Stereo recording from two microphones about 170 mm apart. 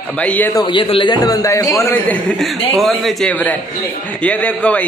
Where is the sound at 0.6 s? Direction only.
30° left (ahead or behind).